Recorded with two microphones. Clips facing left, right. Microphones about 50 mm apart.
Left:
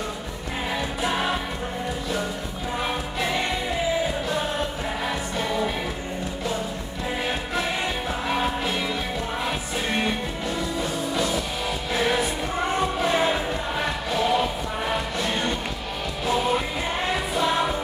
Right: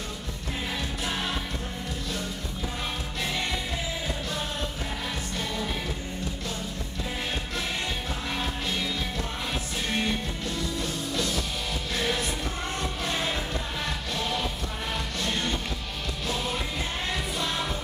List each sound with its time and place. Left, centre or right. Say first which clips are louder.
1.0 s music: left 7 dB; centre
3.2 s music: left 4 dB; centre
8.3 s music: left 7 dB; centre